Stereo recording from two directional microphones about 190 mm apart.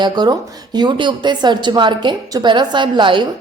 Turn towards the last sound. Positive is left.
turn(degrees=-25)  # may be behind; listen again after turning